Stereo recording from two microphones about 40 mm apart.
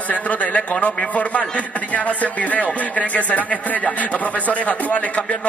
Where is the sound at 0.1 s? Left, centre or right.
Left.